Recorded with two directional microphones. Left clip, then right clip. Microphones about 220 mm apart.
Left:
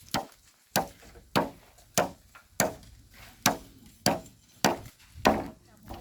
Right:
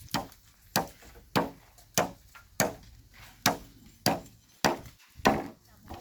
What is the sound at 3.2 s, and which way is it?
Chop, 5° left (ahead or behind).